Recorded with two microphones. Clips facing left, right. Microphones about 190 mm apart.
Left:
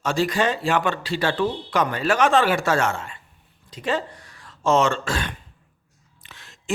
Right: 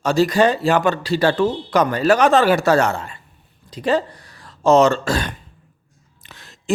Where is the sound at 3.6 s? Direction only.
35° right (ahead or behind).